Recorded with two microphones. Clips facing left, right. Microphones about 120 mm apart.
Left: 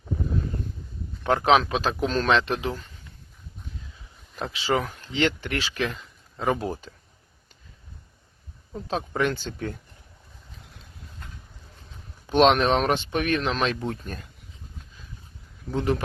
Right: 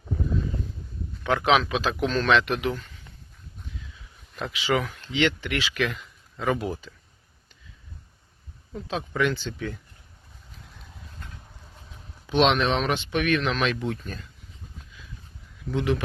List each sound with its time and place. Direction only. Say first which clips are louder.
1.2 s speech: left 2 dB; 40° left (ahead or behind)
4.4 s speech: even; 35° left (ahead or behind)
8.7 s speech: left 2 dB; 35° left (ahead or behind)
12.3 s speech: left 3 dB; 45° left (ahead or behind)
15.7 s speech: even; 40° left (ahead or behind)